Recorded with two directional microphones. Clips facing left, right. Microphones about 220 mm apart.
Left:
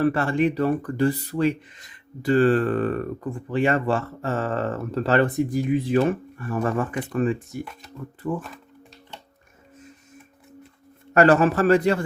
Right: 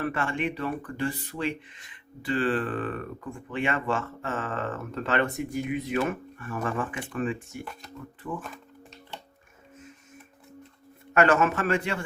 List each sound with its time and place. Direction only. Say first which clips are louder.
0.0 s speech: left 8 dB; 35° left (ahead or behind)
11.1 s speech: left 5 dB; 35° left (ahead or behind)